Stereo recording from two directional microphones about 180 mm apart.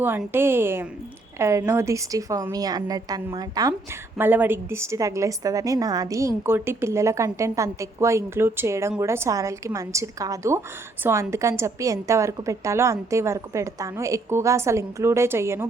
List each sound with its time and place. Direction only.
0.0 s a woman's voice: 10° right (ahead or behind)
4.2 s a woman's voice: 10° right (ahead or behind)